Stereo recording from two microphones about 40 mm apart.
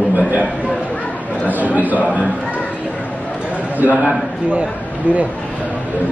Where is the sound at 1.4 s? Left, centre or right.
Right.